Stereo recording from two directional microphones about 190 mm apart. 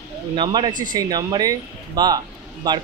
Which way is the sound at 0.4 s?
25° right (ahead or behind).